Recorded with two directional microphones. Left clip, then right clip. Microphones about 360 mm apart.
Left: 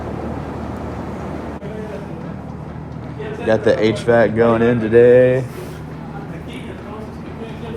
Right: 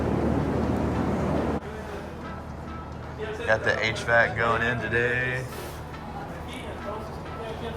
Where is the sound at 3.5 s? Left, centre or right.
Centre.